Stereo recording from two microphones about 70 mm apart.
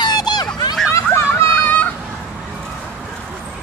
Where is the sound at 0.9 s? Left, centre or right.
Left.